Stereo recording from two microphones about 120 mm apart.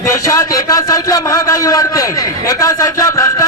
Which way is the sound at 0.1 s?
25° left (ahead or behind).